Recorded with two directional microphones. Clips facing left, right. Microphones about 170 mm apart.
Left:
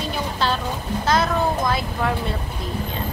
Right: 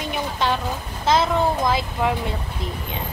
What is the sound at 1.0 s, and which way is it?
A child's voice, 25° right (ahead or behind).